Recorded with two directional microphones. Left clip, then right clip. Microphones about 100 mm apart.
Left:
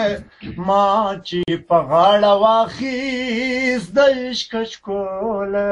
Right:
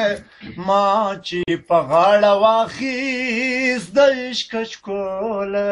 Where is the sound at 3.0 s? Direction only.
50° right (ahead or behind).